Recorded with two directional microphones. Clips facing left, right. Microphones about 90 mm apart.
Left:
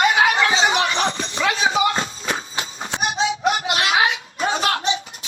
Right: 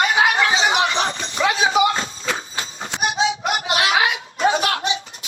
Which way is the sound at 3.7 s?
35° right (ahead or behind).